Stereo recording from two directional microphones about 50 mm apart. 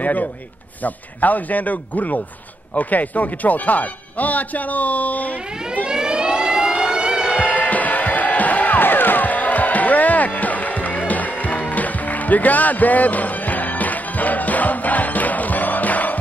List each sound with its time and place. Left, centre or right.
0.0 s speech: left
5.9 s siren: centre
7.2 s music: left